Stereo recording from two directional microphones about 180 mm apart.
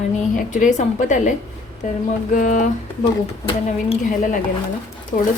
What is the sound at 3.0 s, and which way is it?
Speech, 30° left (ahead or behind).